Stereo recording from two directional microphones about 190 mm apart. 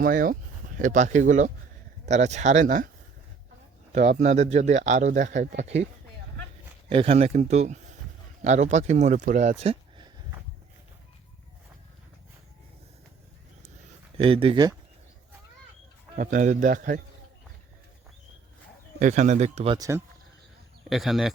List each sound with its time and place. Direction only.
0.0 s speech: 45° right (ahead or behind)
3.9 s speech: 40° right (ahead or behind)
6.9 s speech: 30° right (ahead or behind)
14.2 s speech: 30° right (ahead or behind)
16.1 s speech: 45° right (ahead or behind)
18.9 s speech: 40° right (ahead or behind)
19.7 s speech: 20° right (ahead or behind)
20.9 s speech: centre (ahead or behind)